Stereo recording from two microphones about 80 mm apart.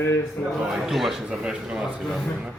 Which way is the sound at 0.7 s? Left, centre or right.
Centre.